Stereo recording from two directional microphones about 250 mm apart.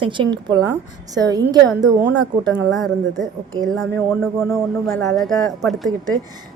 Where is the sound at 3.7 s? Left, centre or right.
Centre.